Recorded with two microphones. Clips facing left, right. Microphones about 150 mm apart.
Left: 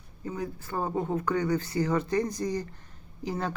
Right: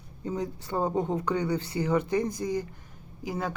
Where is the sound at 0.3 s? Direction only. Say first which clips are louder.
Right 2 dB; 20° right (ahead or behind).